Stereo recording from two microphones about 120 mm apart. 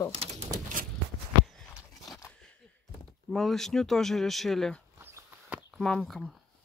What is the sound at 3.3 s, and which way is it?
Speech, 5° left (ahead or behind).